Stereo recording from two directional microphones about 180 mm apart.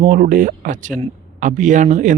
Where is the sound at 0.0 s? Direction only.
50° right (ahead or behind).